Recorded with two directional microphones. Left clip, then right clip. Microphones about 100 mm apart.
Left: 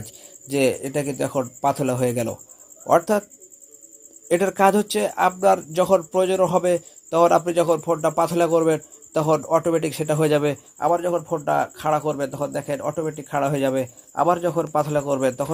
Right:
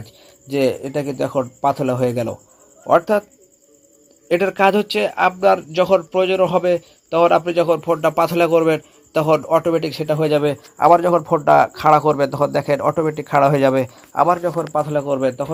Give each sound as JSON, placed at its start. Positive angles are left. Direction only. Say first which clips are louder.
{"t": 0.0, "sound": "speech", "louder": "left 1 dB", "side_deg": 30}
{"t": 4.5, "sound": "speech", "louder": "right 2 dB", "side_deg": 30}
{"t": 7.8, "sound": "a man's voice", "louder": "right 4 dB", "side_deg": 10}
{"t": 10.8, "sound": "a man's voice", "louder": "right 9 dB", "side_deg": -45}
{"t": 14.3, "sound": "a man's voice", "louder": "right 3 dB", "side_deg": 35}
{"t": 14.8, "sound": "speech", "louder": "right 3 dB", "side_deg": 15}